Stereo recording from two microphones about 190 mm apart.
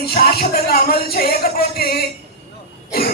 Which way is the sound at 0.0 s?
55° left (ahead or behind).